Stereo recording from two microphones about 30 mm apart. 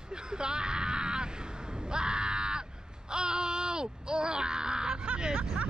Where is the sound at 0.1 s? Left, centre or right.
Right.